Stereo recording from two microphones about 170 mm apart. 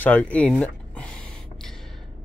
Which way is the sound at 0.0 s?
10° left (ahead or behind).